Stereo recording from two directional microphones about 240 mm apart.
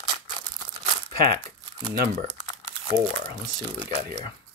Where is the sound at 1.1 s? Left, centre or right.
Right.